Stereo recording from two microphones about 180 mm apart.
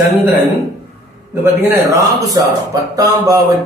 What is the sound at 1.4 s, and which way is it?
A man's voice, 15° right (ahead or behind).